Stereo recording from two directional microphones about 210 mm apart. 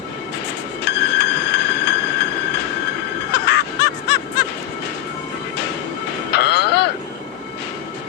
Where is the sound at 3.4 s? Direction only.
55° left (ahead or behind).